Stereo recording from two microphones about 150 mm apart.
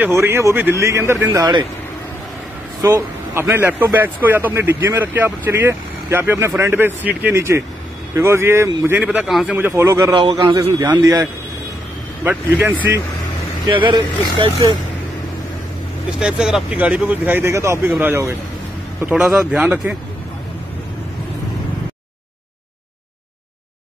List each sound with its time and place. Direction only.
0.0 s a man's voice: 15° right (ahead or behind)
2.8 s speech: 20° right (ahead or behind)
10.1 s a man's voice: 35° right (ahead or behind)
12.3 s speech: 10° right (ahead or behind)
13.7 s speech: 30° right (ahead or behind)
16.2 s speech: 5° right (ahead or behind)